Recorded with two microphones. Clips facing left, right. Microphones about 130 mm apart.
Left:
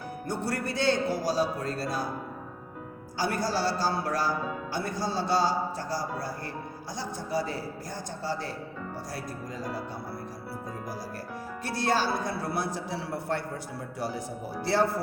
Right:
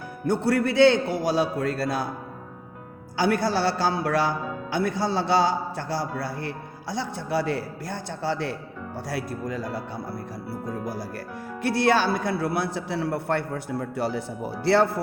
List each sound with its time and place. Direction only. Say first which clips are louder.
0.3 s a man's voice: right 9 dB; 65° right (ahead or behind)
3.2 s a man's voice: right 6 dB; 65° right (ahead or behind)
11.6 s a man's voice: right 6 dB; 65° right (ahead or behind)